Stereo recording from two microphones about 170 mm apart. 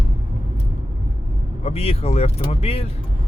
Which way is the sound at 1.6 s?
35° left (ahead or behind).